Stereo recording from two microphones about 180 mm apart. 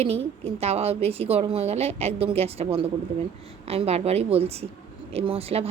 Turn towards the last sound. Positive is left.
turn(degrees=-35)  # may be behind; listen again after turning